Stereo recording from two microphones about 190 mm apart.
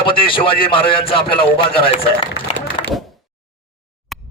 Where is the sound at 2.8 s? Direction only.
30° left (ahead or behind).